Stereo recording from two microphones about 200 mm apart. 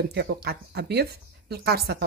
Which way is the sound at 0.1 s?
55° right (ahead or behind).